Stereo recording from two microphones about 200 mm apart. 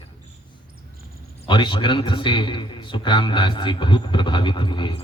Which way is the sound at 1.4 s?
25° left (ahead or behind).